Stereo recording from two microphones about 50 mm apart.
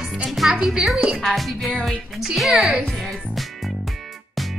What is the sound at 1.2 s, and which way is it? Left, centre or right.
Music, centre.